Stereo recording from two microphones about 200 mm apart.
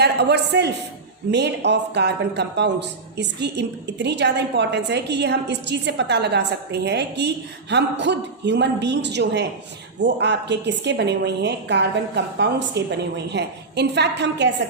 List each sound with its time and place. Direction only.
0.0 s a man's voice: 55° right (ahead or behind)